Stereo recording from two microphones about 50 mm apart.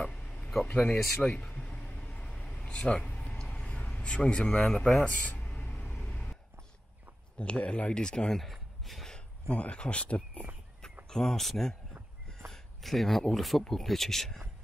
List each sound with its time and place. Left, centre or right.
0.0 s a sound: left
0.7 s speech: left
1.2 s speech: centre
1.5 s vehicle: left
2.6 s a sound: left
3.3 s vehicle: left
4.0 s speech: centre
5.0 s music: left
7.3 s speech: left
8.4 s a sound: centre
9.5 s speech: left
11.1 s speech: centre